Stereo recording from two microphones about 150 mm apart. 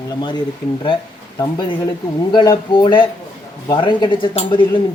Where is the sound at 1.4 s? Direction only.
30° left (ahead or behind).